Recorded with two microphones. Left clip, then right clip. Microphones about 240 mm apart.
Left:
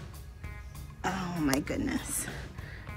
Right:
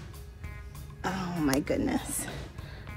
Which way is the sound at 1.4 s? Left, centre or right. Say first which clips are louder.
Right 3 dB; centre.